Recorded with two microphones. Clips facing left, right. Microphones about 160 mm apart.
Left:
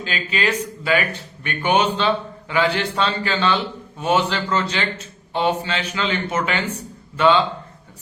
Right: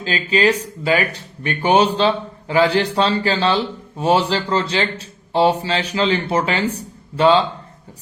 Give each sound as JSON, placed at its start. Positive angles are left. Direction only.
{"t": 0.0, "sound": "a man's voice", "side_deg": -35}